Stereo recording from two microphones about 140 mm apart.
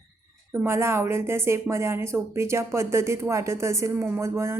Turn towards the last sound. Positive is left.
turn(degrees=-20)  # may be behind; listen again after turning